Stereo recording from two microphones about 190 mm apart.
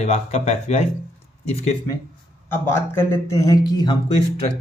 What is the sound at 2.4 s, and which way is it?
Speech, 10° left (ahead or behind).